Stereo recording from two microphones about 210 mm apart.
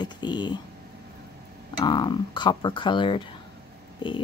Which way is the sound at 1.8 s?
20° left (ahead or behind).